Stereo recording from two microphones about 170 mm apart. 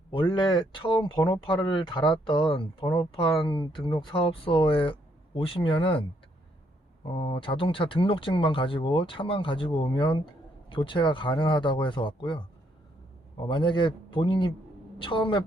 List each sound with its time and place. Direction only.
0.1 s speech: 30° left (ahead or behind)
13.5 s a man's voice: 30° left (ahead or behind)